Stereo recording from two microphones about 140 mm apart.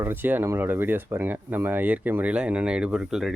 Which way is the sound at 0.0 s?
15° right (ahead or behind).